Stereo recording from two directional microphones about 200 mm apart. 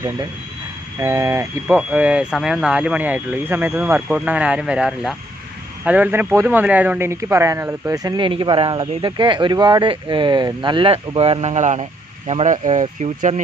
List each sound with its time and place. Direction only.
0.9 s speech: 15° right (ahead or behind); by 13.4 s 35° right (ahead or behind)